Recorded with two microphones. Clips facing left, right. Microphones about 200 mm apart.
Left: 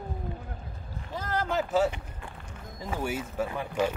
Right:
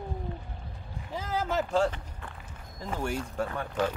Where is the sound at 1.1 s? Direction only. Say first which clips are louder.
Left 1 dB; 5° right (ahead or behind); by 2.4 s 10° left (ahead or behind).